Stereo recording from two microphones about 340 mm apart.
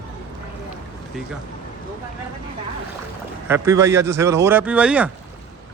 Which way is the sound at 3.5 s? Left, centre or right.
Centre.